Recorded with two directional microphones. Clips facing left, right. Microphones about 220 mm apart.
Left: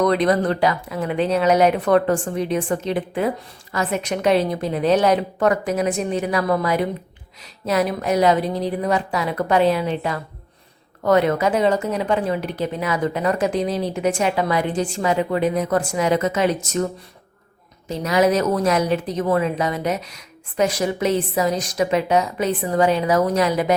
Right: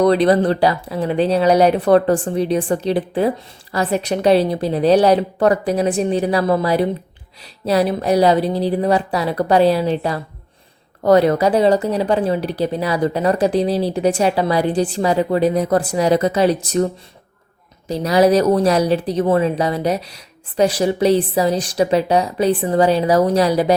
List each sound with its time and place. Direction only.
0.0 s speech: 30° right (ahead or behind)